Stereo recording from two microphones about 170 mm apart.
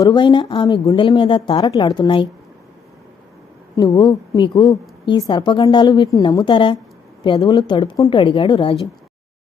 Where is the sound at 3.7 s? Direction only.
20° left (ahead or behind).